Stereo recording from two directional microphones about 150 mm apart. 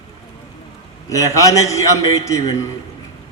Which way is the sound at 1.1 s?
20° left (ahead or behind).